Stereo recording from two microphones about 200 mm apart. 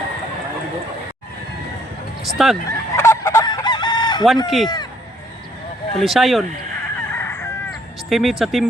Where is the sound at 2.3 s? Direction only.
Centre (ahead or behind).